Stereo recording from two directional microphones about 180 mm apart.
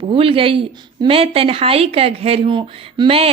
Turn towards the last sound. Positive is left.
turn(degrees=-35)  # may be behind; listen again after turning